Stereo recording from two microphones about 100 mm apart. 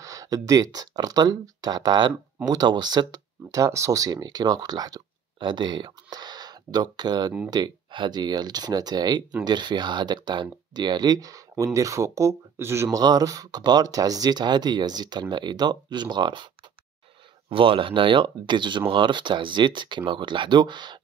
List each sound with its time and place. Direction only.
0.0 s speech: 35° right (ahead or behind)
13.0 s speech: 40° right (ahead or behind)
17.5 s speech: 65° right (ahead or behind)